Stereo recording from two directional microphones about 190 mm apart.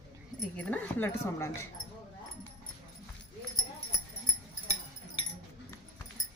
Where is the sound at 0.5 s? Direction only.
5° left (ahead or behind).